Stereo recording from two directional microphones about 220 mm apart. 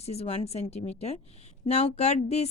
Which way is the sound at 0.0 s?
30° left (ahead or behind).